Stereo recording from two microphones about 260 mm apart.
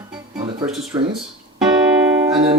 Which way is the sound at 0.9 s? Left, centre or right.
Centre.